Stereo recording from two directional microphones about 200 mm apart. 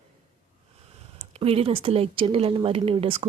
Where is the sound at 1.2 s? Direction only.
30° right (ahead or behind).